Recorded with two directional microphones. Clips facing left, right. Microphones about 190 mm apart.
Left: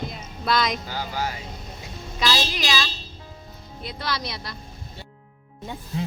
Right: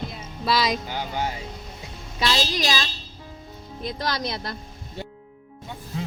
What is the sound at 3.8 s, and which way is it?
Speech, 45° right (ahead or behind).